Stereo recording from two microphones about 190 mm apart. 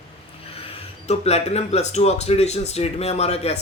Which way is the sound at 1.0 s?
35° left (ahead or behind).